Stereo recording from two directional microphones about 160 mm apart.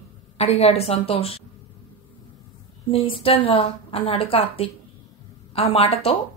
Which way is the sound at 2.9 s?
35° left (ahead or behind).